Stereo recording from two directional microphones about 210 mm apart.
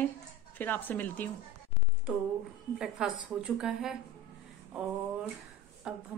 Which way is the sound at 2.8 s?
5° right (ahead or behind).